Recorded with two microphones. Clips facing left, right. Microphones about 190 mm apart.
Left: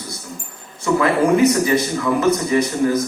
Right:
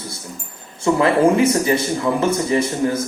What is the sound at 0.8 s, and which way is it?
A man's voice, 25° right (ahead or behind).